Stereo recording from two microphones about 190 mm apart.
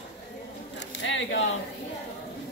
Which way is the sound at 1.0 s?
75° left (ahead or behind).